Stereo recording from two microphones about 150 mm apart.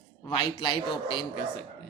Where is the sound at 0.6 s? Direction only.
35° left (ahead or behind).